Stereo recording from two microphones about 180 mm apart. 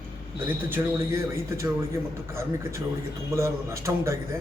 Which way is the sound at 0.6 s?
10° right (ahead or behind).